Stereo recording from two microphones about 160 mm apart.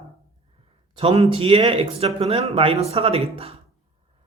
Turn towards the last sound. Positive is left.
turn(degrees=-35)  # may be behind; listen again after turning